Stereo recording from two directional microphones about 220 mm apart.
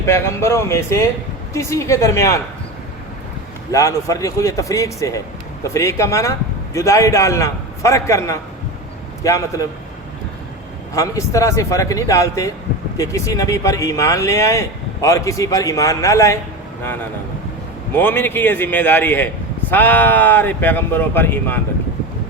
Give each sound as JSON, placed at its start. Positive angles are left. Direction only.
{"t": 0.0, "sound": "speech", "side_deg": 10}
{"t": 3.7, "sound": "speech", "side_deg": 15}
{"t": 10.9, "sound": "speech", "side_deg": 15}
{"t": 17.9, "sound": "speech", "side_deg": 10}